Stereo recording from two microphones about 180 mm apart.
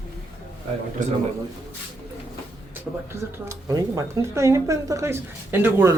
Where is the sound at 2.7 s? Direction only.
15° right (ahead or behind).